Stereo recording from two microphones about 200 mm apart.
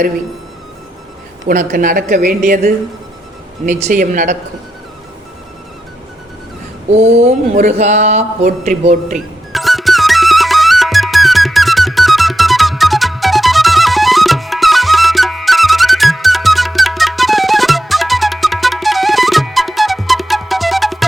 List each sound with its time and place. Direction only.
1.5 s a woman's voice: 45° right (ahead or behind)
6.9 s speech: 35° right (ahead or behind)
9.1 s music: centre (ahead or behind)